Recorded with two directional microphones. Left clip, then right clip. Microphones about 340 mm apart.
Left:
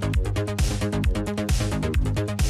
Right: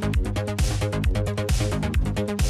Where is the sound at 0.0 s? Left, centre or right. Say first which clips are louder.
Even; centre.